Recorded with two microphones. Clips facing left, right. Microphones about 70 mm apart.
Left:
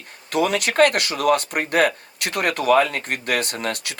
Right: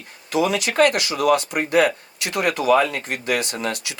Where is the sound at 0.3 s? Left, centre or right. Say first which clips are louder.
Left 1 dB; left.